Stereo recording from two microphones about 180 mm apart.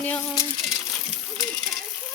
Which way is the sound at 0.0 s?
10° left (ahead or behind).